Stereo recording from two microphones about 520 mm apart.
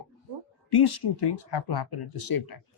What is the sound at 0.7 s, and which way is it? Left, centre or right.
Speech, left.